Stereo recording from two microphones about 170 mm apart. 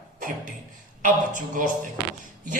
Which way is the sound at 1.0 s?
50° right (ahead or behind).